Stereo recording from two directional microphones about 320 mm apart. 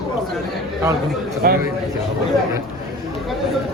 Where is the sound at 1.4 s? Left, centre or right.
Right.